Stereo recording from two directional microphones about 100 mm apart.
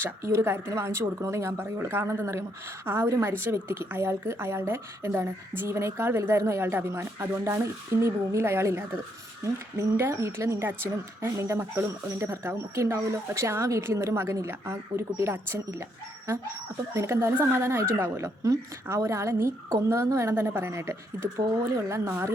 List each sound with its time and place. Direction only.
0.0 s a woman's voice: 25° right (ahead or behind)
10.0 s a woman's voice: 25° right (ahead or behind)
16.9 s a woman's voice: 30° right (ahead or behind)